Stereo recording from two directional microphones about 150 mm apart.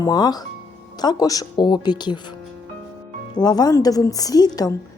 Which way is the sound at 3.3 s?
25° left (ahead or behind).